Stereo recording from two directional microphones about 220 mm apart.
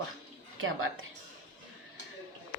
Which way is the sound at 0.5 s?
65° right (ahead or behind).